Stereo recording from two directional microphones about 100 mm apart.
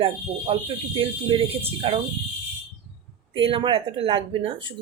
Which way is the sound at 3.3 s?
60° right (ahead or behind).